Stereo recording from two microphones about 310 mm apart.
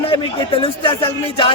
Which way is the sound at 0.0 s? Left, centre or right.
Centre.